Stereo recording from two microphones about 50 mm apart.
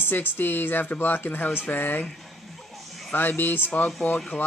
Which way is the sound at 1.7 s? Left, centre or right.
Left.